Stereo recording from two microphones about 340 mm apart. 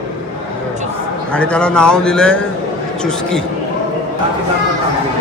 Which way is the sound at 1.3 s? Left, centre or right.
Centre.